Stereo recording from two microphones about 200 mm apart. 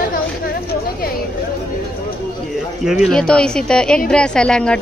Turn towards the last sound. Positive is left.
turn(degrees=5)  # may be behind; listen again after turning